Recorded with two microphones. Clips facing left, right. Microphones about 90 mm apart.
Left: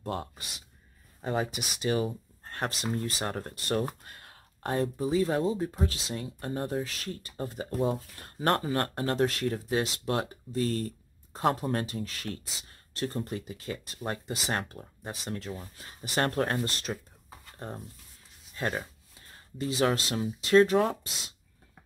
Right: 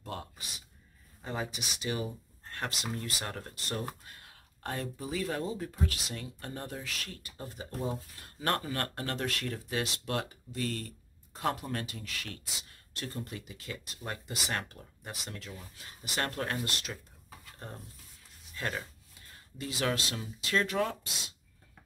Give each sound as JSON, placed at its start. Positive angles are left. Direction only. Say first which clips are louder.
{"t": 0.0, "sound": "speech", "louder": "left 6 dB", "side_deg": 35}
{"t": 1.2, "sound": "speech", "louder": "left 6 dB", "side_deg": 55}
{"t": 4.6, "sound": "speech", "louder": "left 8 dB", "side_deg": 30}
{"t": 7.3, "sound": "speech", "louder": "left 8 dB", "side_deg": 50}
{"t": 8.4, "sound": "speech", "louder": "left 5 dB", "side_deg": 35}
{"t": 18.6, "sound": "speech", "louder": "left 4 dB", "side_deg": 35}